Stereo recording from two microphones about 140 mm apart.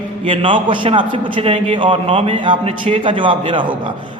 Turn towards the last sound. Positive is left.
turn(degrees=-35)  # may be behind; listen again after turning